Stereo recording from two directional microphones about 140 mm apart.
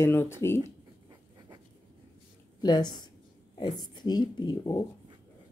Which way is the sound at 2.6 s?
30° left (ahead or behind).